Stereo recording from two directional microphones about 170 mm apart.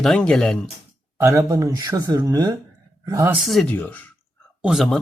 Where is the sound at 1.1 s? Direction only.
20° right (ahead or behind).